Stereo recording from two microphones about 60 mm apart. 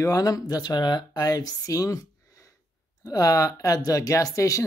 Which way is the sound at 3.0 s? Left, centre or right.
Left.